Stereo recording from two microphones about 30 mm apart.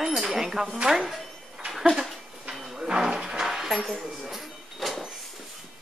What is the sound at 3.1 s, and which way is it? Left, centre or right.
Music, right.